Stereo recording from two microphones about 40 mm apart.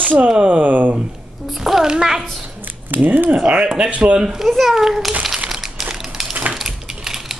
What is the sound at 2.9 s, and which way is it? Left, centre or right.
Speech, right.